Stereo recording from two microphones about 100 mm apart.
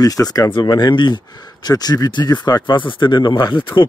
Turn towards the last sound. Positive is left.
turn(degrees=55)  # may be behind; listen again after turning